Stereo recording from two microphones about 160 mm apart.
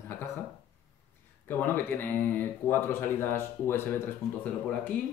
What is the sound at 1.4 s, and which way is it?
Speech, 15° left (ahead or behind).